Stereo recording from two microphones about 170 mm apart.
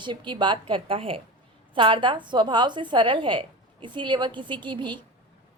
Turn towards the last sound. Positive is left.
turn(degrees=-25)  # may be behind; listen again after turning